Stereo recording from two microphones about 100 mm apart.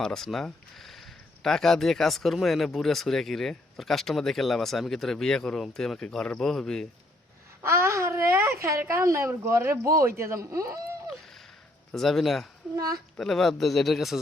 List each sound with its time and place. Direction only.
0.0 s speech: 5° left (ahead or behind)
7.6 s speech: 25° right (ahead or behind)
11.9 s speech: 5° left (ahead or behind)
12.7 s speech: 40° right (ahead or behind)
13.1 s speech: 5° left (ahead or behind)